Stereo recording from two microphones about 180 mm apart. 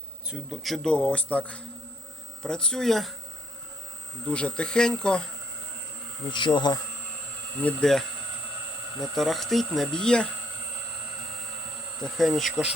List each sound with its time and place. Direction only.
0.3 s speech: centre (ahead or behind)
4.3 s speech: 5° left (ahead or behind)
6.3 s bee: 25° left (ahead or behind)
7.6 s speech: 5° left (ahead or behind)
12.0 s speech: centre (ahead or behind)